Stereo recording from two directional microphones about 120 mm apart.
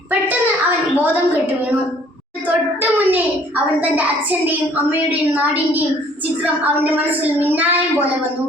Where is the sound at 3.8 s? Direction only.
15° right (ahead or behind).